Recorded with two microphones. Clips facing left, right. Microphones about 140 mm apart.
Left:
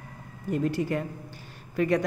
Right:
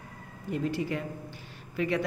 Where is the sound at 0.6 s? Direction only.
45° left (ahead or behind).